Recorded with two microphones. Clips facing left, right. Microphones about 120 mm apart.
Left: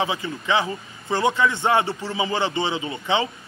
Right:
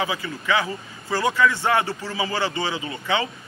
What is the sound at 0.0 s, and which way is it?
A man's voice, 25° left (ahead or behind).